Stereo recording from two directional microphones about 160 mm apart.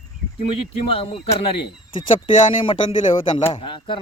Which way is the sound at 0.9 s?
35° left (ahead or behind).